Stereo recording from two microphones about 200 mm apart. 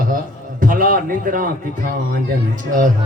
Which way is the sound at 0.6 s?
45° right (ahead or behind).